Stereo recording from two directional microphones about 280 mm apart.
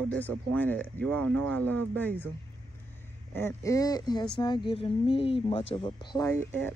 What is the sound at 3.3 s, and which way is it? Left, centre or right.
Speech, centre.